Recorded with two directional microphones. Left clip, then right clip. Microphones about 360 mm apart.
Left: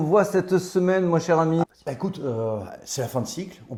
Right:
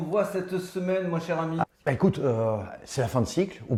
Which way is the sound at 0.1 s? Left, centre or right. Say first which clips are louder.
Left 7 dB; left.